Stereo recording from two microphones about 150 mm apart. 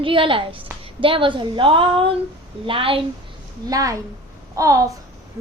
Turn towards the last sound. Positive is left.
turn(degrees=-20)  # may be behind; listen again after turning